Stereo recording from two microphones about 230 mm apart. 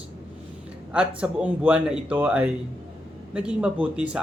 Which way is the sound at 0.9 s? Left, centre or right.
Centre.